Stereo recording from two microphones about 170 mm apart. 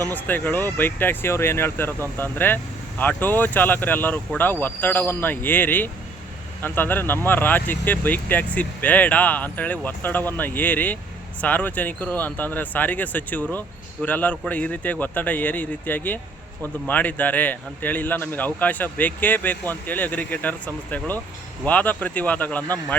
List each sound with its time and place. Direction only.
0.1 s speech: 10° left (ahead or behind)